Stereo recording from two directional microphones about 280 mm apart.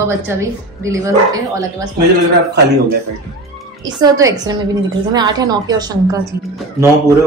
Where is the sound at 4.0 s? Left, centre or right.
Centre.